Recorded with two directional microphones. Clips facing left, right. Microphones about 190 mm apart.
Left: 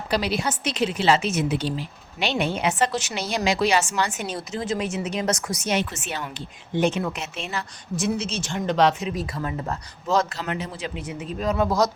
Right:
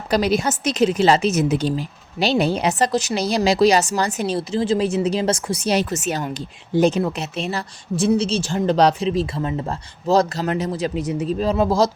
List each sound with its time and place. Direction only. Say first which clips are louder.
0.1 s a woman's voice: right 6 dB; 45° right (ahead or behind); by 11.9 s 30° right (ahead or behind)